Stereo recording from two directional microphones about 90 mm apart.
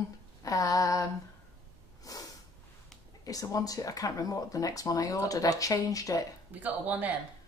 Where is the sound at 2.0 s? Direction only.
40° left (ahead or behind).